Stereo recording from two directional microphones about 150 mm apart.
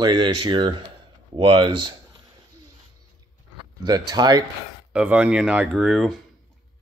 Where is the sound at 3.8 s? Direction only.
25° right (ahead or behind).